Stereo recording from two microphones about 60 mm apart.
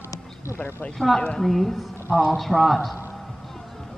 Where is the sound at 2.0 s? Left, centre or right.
Centre.